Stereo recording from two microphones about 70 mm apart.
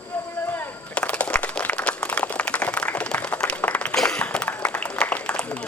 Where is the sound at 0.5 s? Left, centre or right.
Left.